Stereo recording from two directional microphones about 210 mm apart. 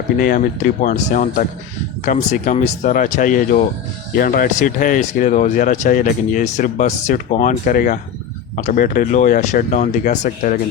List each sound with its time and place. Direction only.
0.2 s speech: 40° left (ahead or behind)